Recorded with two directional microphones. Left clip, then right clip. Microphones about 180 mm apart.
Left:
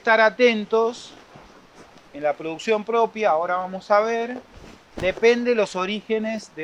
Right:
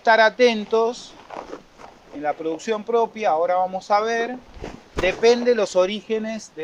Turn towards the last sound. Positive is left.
turn(degrees=45)  # may be behind; listen again after turning